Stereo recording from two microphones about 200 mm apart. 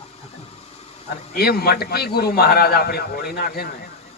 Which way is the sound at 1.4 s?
50° left (ahead or behind).